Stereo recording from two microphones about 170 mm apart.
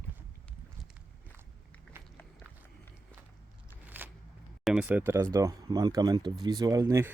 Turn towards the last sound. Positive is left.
turn(degrees=-15)  # may be behind; listen again after turning